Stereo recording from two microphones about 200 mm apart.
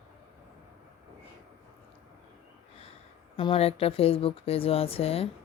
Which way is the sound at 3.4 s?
30° left (ahead or behind).